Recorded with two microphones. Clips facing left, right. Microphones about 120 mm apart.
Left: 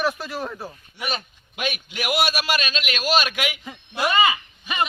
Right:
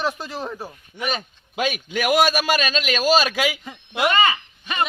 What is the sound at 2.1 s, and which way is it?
A man's voice, 45° right (ahead or behind).